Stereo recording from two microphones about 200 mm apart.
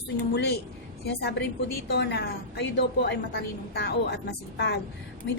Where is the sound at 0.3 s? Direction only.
55° left (ahead or behind).